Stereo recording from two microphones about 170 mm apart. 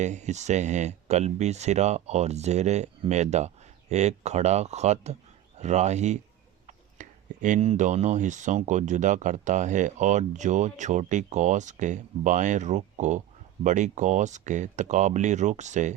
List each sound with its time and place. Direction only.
0.0 s speech: 45° right (ahead or behind)